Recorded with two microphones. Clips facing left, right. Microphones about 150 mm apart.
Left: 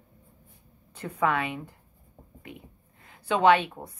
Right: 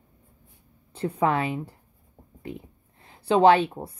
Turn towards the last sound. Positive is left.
turn(degrees=-30)  # may be behind; listen again after turning